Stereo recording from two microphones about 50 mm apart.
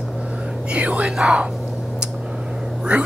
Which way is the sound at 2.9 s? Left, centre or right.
Right.